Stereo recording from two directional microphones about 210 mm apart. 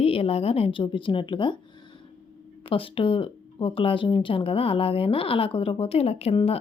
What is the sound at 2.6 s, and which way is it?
Speech, 25° left (ahead or behind).